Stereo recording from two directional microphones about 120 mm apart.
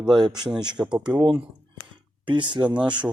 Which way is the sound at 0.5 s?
40° right (ahead or behind).